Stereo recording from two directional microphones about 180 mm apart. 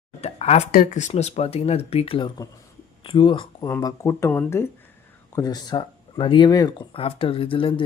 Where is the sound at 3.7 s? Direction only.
15° left (ahead or behind).